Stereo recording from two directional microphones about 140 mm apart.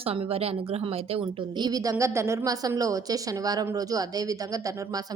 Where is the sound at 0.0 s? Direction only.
45° right (ahead or behind).